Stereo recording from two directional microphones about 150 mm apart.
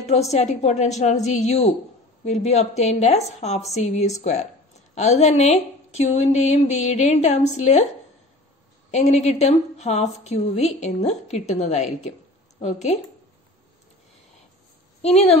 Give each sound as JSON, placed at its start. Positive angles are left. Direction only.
{"t": 0.0, "sound": "a woman's voice", "side_deg": 45}
{"t": 8.9, "sound": "a woman's voice", "side_deg": 50}
{"t": 15.0, "sound": "speech", "side_deg": 45}